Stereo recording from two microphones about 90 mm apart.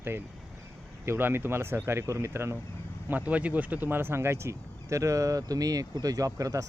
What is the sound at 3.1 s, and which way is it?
Speech, 15° right (ahead or behind).